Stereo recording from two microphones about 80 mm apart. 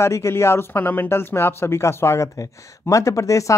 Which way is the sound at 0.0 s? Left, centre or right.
Left.